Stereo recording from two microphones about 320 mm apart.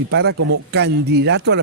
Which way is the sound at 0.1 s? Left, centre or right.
Right.